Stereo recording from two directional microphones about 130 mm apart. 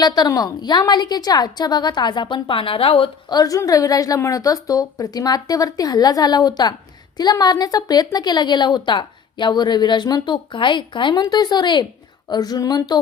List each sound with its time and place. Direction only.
0.0 s a woman's voice: 30° left (ahead or behind)
3.3 s a woman's voice: 25° left (ahead or behind)